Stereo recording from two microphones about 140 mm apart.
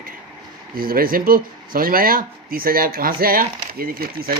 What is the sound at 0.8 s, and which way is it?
Speech, 90° right.